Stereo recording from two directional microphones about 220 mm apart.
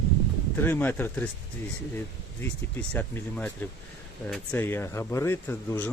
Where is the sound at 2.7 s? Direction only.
10° left (ahead or behind).